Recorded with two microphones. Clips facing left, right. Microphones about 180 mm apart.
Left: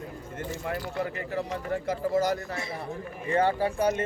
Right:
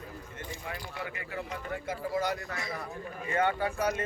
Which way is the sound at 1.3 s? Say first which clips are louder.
Left 6 dB; 40° left (ahead or behind).